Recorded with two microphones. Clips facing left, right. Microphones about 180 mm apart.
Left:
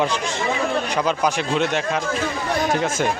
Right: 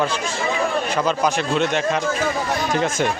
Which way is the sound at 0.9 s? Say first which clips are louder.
Right 2 dB; 10° left (ahead or behind).